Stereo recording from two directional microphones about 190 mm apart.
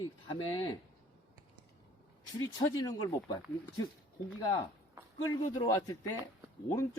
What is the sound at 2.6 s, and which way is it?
Speech, 20° left (ahead or behind).